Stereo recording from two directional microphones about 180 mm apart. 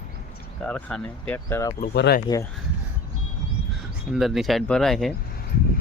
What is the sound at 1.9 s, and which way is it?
Speech, 65° left (ahead or behind).